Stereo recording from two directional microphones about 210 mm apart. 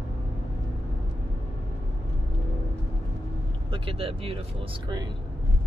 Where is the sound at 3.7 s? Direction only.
25° right (ahead or behind).